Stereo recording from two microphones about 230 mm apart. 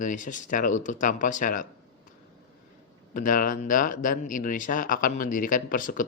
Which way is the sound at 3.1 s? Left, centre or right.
Left.